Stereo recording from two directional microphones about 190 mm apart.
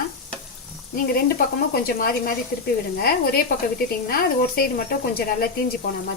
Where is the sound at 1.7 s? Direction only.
50° left (ahead or behind).